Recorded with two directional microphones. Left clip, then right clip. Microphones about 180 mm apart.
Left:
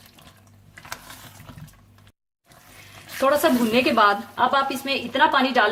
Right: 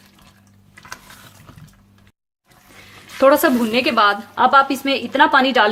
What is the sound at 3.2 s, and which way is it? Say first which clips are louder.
A woman's voice: right 6 dB; 55° right (ahead or behind).